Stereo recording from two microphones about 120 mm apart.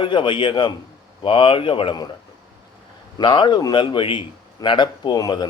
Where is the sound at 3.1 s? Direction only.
40° left (ahead or behind).